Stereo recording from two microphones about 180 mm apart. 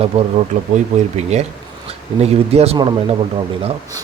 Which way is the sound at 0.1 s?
35° right (ahead or behind).